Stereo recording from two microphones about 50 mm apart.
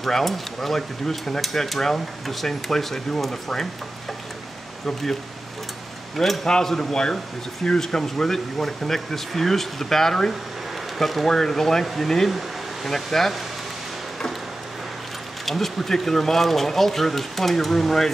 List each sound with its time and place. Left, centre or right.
0.0 s speech: centre
6.1 s speech: centre
15.4 s speech: centre